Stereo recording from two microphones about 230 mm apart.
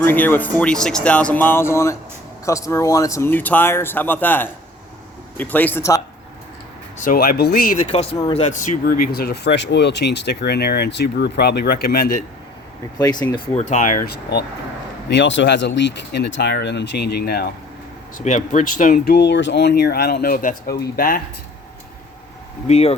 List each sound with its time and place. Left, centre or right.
0.0 s speech: centre
7.0 s speech: left
13.0 s speech: centre; by 17.5 s left
18.3 s speech: left
22.6 s speech: left